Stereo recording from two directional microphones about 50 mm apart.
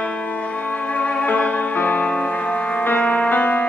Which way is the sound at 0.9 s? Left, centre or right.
Left.